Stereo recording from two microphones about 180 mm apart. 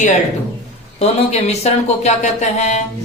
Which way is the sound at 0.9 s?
35° left (ahead or behind).